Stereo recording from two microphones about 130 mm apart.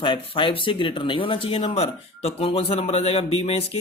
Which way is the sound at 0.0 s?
40° left (ahead or behind).